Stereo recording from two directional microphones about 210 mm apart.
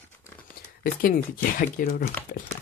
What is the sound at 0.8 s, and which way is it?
Speech, 45° left (ahead or behind).